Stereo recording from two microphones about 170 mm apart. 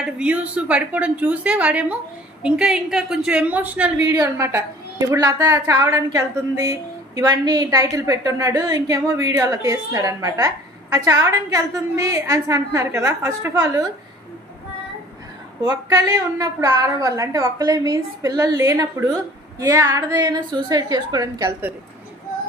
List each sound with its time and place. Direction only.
0.0 s a woman's voice: 5° right (ahead or behind)
4.2 s a woman's voice: 20° right (ahead or behind)
15.6 s a woman's voice: 20° right (ahead or behind)